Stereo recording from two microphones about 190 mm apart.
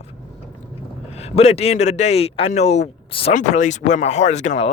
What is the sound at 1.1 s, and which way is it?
Speech, 35° left (ahead or behind).